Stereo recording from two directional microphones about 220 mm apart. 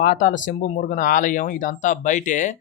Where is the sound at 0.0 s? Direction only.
35° left (ahead or behind).